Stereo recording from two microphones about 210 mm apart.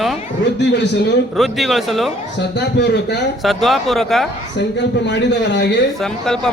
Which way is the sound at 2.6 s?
55° left (ahead or behind).